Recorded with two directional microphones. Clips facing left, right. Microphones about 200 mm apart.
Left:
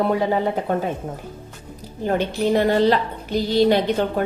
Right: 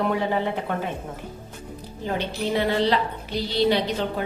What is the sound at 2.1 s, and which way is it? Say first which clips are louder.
A woman's voice: left 6 dB; 50° left (ahead or behind).